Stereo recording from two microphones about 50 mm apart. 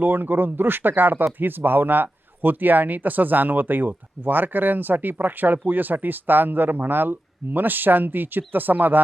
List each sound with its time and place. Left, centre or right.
0.0 s speech: right